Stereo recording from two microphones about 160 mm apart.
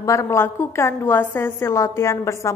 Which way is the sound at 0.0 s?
20° left (ahead or behind).